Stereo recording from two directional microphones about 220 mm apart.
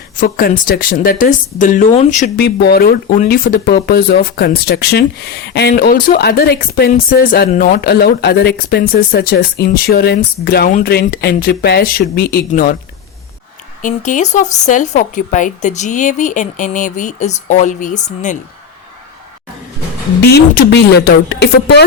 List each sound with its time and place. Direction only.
0.2 s speech: 40° left (ahead or behind)
13.8 s speech: 35° left (ahead or behind)
20.2 s speech: 45° left (ahead or behind)